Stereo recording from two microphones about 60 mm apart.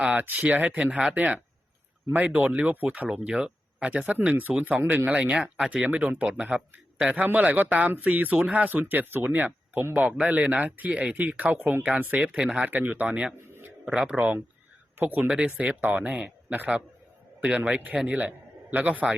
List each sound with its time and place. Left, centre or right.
0.1 s speech: right
3.1 s speech: centre
12.3 s a man's voice: centre
12.6 s speech: right
13.1 s a man's voice: centre
13.5 s a sound: right
13.9 s a man's voice: centre
15.0 s a man's voice: right
18.3 s a man's voice: right